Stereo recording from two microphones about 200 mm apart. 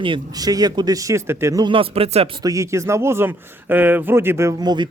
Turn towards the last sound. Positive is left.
turn(degrees=-20)  # may be behind; listen again after turning